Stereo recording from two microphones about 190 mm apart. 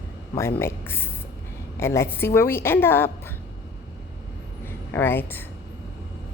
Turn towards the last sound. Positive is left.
turn(degrees=10)  # may be behind; listen again after turning